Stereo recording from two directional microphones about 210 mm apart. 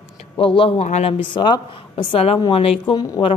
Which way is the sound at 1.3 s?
20° left (ahead or behind).